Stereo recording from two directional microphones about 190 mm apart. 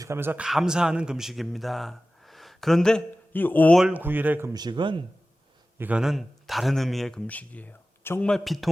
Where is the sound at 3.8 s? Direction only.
10° right (ahead or behind); by 5.0 s 25° right (ahead or behind).